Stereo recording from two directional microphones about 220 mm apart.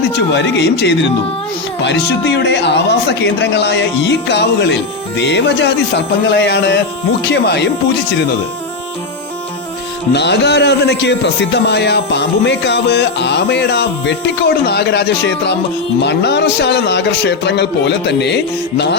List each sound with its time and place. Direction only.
0.1 s speech: 50° left (ahead or behind)
10.1 s speech: 50° left (ahead or behind)